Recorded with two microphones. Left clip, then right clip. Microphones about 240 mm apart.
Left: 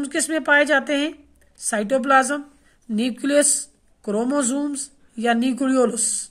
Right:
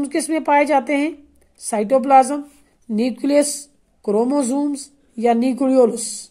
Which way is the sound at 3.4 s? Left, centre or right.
Left.